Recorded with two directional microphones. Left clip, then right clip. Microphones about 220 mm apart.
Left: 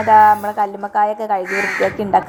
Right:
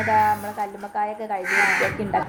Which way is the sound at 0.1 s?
25° left (ahead or behind).